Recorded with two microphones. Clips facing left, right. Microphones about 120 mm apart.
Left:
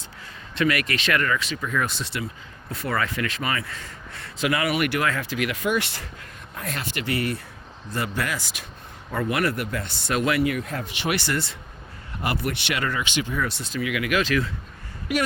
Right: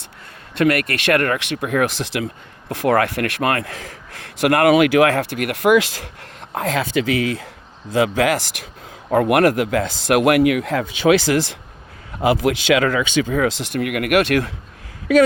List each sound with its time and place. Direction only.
0.5 s a man's voice: 55° right (ahead or behind); by 6.7 s 90° right
7.9 s speech: 90° right
9.0 s speech: 70° right (ahead or behind)